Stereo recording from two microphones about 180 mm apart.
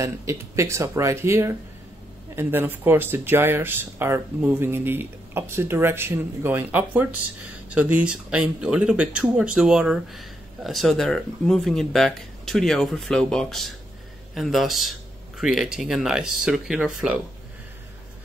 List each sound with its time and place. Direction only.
0.0 s speech: 15° right (ahead or behind)